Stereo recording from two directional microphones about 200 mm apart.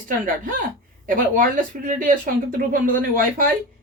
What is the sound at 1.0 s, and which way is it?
Speech, 40° right (ahead or behind).